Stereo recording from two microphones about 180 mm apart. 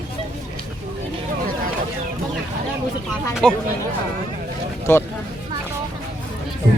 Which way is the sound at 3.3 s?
Centre (ahead or behind).